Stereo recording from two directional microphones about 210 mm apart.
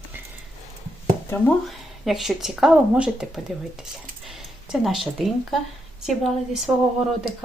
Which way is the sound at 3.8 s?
Centre (ahead or behind).